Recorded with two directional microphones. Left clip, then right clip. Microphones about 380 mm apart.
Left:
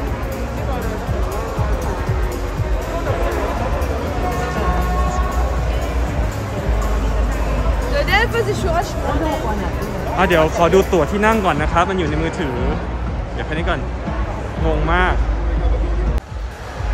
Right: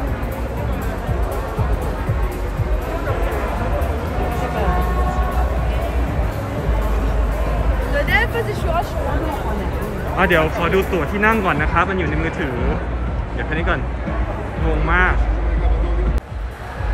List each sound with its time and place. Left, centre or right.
8.0 s vehicle: left
10.1 s speech: centre
14.9 s speech: centre